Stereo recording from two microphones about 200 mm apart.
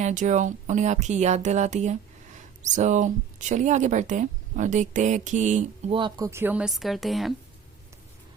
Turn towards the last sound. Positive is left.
turn(degrees=0)  # may be behind; listen again after turning